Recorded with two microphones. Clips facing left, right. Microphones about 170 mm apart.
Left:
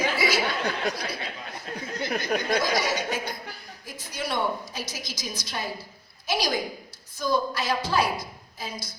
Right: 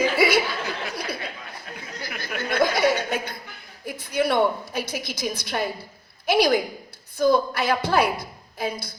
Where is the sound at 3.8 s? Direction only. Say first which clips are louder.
Right 9 dB; 60° right (ahead or behind).